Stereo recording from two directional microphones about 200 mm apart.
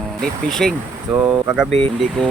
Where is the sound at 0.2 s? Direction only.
Centre (ahead or behind).